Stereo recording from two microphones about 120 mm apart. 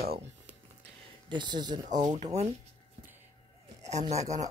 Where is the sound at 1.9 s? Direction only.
90° right.